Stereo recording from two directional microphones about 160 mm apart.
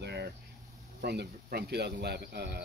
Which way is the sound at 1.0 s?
90° right.